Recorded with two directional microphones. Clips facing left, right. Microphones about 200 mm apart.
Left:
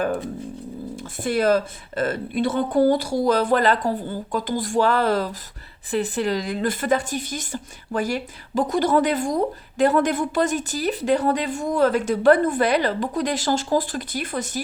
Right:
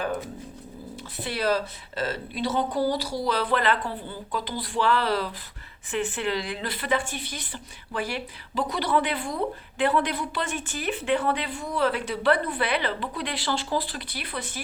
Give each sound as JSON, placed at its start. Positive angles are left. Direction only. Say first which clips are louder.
{"t": 1.2, "sound": "a woman's voice", "louder": "left 7 dB", "side_deg": 50}